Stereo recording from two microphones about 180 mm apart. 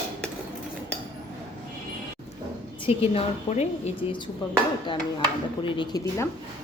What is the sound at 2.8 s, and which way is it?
A woman's voice, 35° left (ahead or behind).